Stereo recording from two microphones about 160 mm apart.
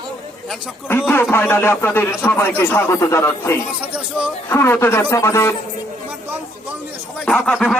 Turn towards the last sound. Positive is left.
turn(degrees=5)  # may be behind; listen again after turning